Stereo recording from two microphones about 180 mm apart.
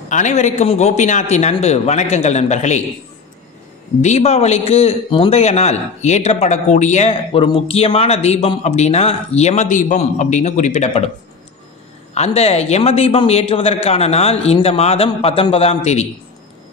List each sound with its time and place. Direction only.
0.1 s a man's voice: 40° left (ahead or behind)
4.0 s a man's voice: 35° left (ahead or behind)
12.1 s a man's voice: 35° left (ahead or behind)